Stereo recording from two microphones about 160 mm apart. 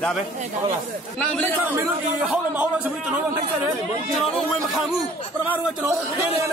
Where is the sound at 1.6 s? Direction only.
10° right (ahead or behind).